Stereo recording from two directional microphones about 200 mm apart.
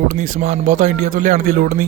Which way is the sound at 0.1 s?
40° right (ahead or behind).